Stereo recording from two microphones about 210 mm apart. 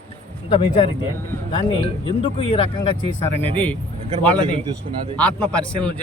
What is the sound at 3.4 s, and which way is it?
A man's voice, 5° left (ahead or behind).